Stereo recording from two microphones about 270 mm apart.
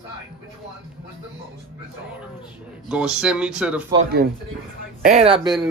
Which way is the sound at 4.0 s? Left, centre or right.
Right.